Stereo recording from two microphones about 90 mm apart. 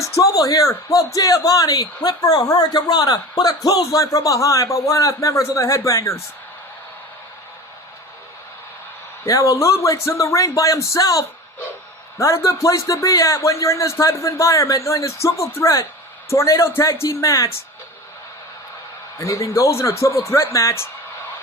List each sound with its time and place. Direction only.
0.0 s speech: 40° left (ahead or behind)
9.2 s speech: 35° left (ahead or behind)
19.2 s speech: 35° left (ahead or behind)